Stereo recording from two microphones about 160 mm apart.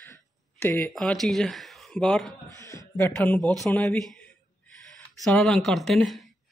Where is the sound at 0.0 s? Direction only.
15° left (ahead or behind).